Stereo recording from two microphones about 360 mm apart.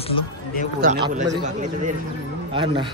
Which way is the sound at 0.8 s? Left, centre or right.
Centre.